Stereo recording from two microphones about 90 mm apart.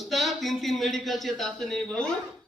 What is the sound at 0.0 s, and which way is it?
A man's voice, centre (ahead or behind).